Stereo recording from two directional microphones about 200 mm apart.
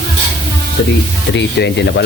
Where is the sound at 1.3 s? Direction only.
60° left (ahead or behind).